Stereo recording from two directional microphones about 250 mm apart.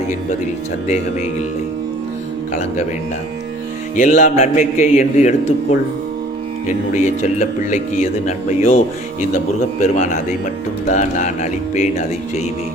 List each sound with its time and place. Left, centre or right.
3.9 s speech: left
6.7 s speech: left